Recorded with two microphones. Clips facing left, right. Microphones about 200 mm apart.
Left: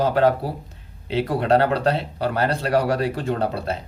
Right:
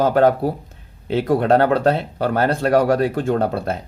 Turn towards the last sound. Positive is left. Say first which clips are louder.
# right 4 dB
turn(degrees=-50)  # may be behind; listen again after turning